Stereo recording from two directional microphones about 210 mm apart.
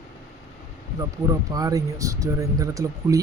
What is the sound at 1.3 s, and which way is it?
Speech, 15° right (ahead or behind).